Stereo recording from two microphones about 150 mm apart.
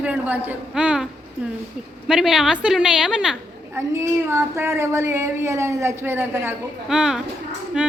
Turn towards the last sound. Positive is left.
turn(degrees=-5)  # may be behind; listen again after turning